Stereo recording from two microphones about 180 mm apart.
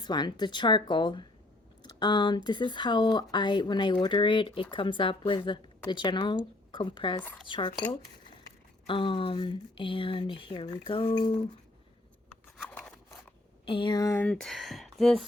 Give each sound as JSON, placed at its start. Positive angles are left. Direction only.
{"t": 0.0, "sound": "speech", "side_deg": 25}
{"t": 8.9, "sound": "speech", "side_deg": 30}
{"t": 12.6, "sound": "scissors", "side_deg": 10}
{"t": 13.7, "sound": "speech", "side_deg": 25}
{"t": 14.3, "sound": "speech", "side_deg": 5}